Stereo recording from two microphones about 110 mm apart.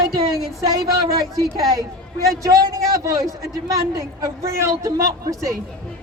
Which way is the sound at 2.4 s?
30° right (ahead or behind).